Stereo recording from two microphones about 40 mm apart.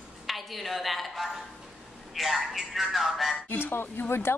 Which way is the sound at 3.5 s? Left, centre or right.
Left.